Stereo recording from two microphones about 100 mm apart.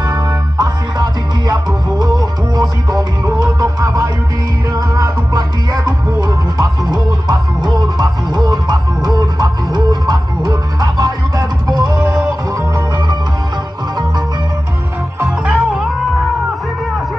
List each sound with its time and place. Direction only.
0.0 s music: 40° right (ahead or behind)
15.2 s music: 10° right (ahead or behind)